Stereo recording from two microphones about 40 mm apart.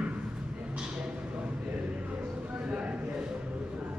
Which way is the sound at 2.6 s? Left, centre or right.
Right.